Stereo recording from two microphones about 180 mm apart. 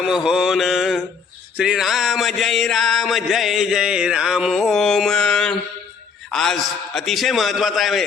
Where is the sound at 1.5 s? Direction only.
5° right (ahead or behind).